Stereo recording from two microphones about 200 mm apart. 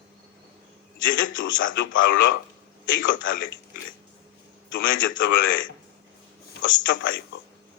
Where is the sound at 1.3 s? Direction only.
75° left (ahead or behind).